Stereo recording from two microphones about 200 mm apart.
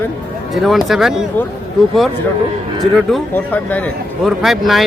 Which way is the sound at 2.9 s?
5° left (ahead or behind).